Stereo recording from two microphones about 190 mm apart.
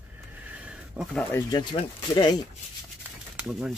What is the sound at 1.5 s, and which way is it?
Speech, 25° left (ahead or behind).